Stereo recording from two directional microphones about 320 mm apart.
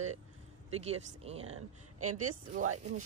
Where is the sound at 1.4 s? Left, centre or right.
Right.